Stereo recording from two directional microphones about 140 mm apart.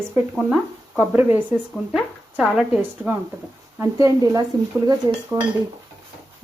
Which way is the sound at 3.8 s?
25° right (ahead or behind).